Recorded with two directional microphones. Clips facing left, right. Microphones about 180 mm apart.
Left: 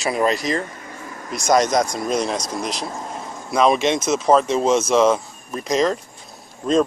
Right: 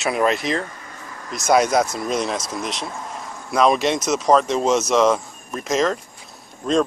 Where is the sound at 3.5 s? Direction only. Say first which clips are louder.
Left 1 dB; centre (ahead or behind).